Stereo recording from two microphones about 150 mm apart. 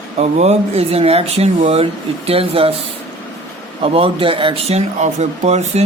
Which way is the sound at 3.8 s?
35° right (ahead or behind).